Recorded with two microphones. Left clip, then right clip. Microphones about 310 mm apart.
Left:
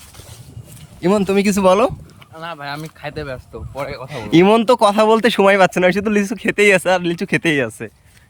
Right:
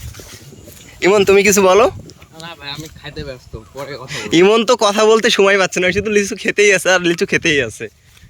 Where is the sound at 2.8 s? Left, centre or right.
Left.